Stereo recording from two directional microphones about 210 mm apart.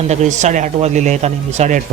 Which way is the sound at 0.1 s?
35° right (ahead or behind).